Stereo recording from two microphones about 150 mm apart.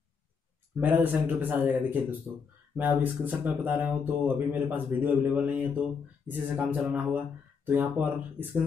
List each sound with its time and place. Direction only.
0.7 s speech: 10° right (ahead or behind)